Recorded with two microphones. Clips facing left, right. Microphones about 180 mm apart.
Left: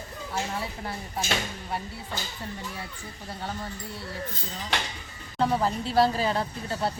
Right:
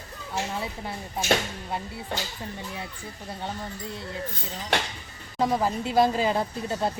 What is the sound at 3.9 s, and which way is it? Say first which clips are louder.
Speech: right 2 dB; 20° right (ahead or behind).